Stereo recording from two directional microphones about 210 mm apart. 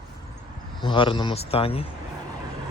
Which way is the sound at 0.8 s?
25° left (ahead or behind).